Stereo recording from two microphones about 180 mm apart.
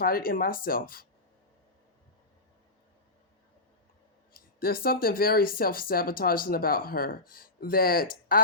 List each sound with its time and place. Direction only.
0.0 s speech: 55° left (ahead or behind)
4.4 s speech: 55° left (ahead or behind)